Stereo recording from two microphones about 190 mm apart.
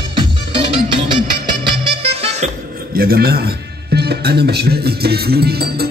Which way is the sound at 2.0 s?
30° right (ahead or behind).